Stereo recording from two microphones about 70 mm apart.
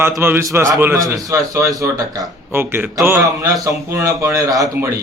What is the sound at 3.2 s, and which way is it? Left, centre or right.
A man's voice, right.